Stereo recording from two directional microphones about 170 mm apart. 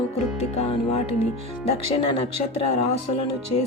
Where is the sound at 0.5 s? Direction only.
40° left (ahead or behind).